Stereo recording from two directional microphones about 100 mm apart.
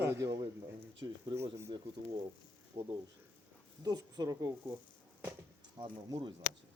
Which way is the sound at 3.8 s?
40° right (ahead or behind).